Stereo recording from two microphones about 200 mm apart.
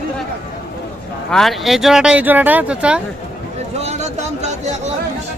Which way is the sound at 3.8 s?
35° right (ahead or behind).